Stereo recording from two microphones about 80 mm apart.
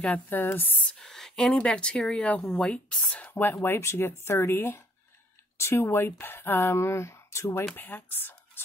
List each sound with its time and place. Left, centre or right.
0.3 s speech: left
0.9 s speech: centre; by 8.6 s left